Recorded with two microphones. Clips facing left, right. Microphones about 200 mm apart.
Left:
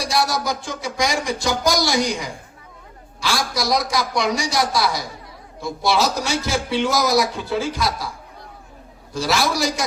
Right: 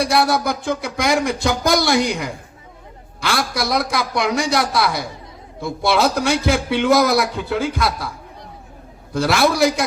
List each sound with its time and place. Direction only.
0.0 s speech: 60° right (ahead or behind)
9.1 s speech: 60° right (ahead or behind)